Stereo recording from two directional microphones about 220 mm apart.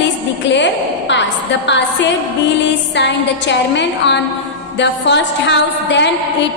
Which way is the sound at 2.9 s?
50° left (ahead or behind).